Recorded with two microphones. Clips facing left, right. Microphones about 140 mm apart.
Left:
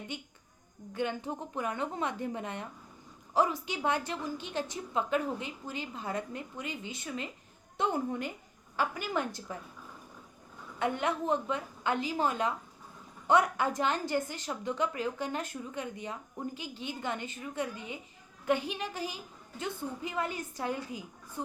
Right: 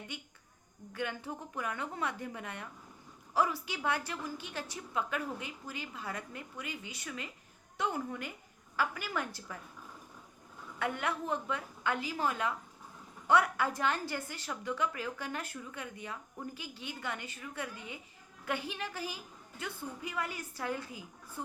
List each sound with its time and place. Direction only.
0.9 s a woman's voice: 20° left (ahead or behind)
10.8 s a woman's voice: 20° left (ahead or behind)